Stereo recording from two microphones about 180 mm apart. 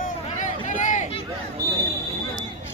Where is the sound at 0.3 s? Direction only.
45° left (ahead or behind).